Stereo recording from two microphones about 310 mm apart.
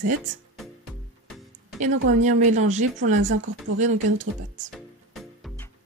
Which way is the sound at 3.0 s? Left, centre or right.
Right.